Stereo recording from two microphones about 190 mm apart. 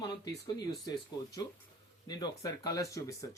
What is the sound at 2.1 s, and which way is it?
Speech, 20° left (ahead or behind).